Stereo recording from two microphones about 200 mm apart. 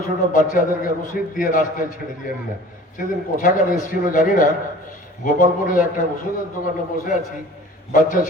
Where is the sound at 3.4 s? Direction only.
40° left (ahead or behind).